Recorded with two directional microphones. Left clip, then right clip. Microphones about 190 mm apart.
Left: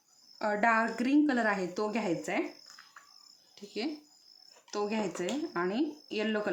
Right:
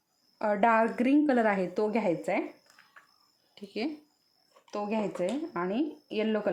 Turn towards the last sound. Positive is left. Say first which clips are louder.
# right 3 dB
turn(degrees=-25)  # may be behind; listen again after turning